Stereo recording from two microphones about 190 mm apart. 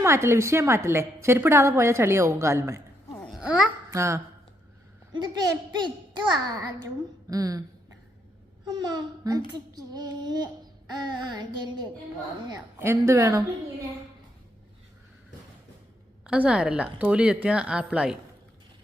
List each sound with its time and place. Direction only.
0.0 s a woman's voice: 15° right (ahead or behind)
8.6 s a child's voice: 20° right (ahead or behind)
16.2 s a woman's voice: 5° right (ahead or behind)